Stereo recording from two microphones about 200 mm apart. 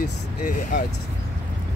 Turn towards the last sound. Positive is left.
turn(degrees=40)  # may be behind; listen again after turning